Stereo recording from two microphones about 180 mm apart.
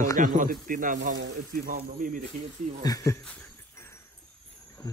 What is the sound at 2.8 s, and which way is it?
Speech, 20° left (ahead or behind).